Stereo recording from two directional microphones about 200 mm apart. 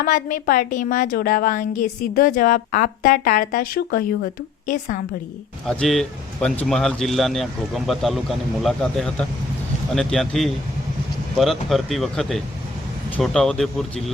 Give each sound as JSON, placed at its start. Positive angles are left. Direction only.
{"t": 0.0, "sound": "speech", "side_deg": 45}
{"t": 5.6, "sound": "a man's voice", "side_deg": 0}